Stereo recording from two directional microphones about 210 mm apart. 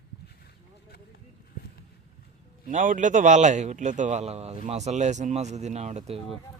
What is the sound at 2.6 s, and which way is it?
A man's voice, 40° right (ahead or behind).